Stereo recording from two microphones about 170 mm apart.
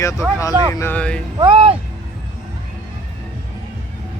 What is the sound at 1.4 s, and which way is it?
Speech, 30° right (ahead or behind).